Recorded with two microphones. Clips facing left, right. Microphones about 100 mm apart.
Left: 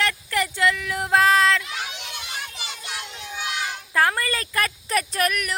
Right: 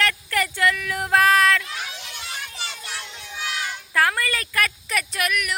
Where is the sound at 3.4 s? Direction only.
25° left (ahead or behind).